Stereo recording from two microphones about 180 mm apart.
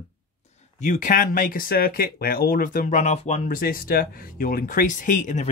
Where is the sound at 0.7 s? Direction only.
45° left (ahead or behind).